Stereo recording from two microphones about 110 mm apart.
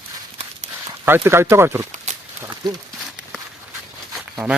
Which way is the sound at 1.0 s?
20° right (ahead or behind).